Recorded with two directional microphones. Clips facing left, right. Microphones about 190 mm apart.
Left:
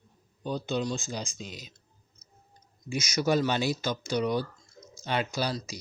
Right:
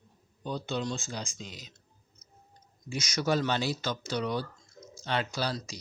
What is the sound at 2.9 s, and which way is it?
Speech, 10° left (ahead or behind).